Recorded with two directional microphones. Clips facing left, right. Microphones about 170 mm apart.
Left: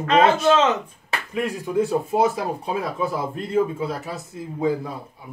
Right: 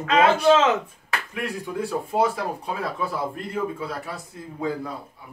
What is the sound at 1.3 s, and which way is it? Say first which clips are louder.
Speech: left 8 dB; 20° left (ahead or behind).